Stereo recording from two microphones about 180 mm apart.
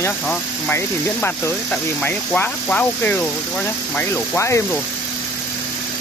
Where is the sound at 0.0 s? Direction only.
10° left (ahead or behind).